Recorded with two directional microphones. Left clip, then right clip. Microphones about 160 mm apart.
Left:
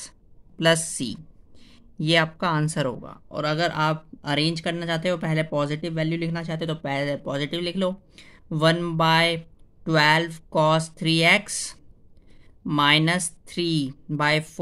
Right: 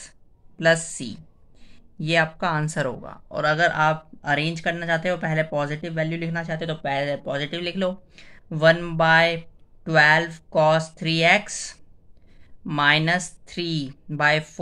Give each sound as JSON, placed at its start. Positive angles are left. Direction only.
{"t": 0.6, "sound": "speech", "side_deg": 35}